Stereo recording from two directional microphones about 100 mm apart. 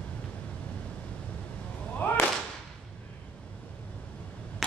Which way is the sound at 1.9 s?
20° left (ahead or behind).